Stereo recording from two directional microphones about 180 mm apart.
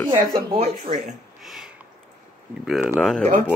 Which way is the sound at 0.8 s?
45° right (ahead or behind).